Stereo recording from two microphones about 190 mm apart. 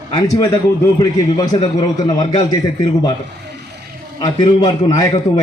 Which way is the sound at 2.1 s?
20° left (ahead or behind).